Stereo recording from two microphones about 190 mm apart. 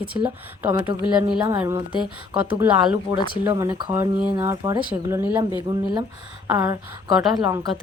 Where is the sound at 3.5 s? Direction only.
20° right (ahead or behind).